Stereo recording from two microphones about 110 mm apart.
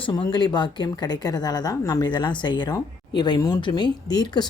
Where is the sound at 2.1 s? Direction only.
45° left (ahead or behind).